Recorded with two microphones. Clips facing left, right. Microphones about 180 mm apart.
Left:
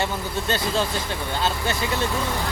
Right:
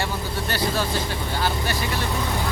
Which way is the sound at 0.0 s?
20° left (ahead or behind).